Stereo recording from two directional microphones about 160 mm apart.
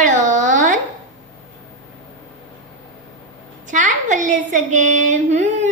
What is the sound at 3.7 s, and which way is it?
A woman's voice, 50° right (ahead or behind).